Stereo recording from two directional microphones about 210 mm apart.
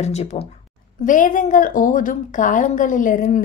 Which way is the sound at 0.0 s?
30° left (ahead or behind).